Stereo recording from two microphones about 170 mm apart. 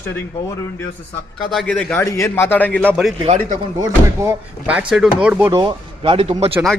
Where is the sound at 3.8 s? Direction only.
15° right (ahead or behind).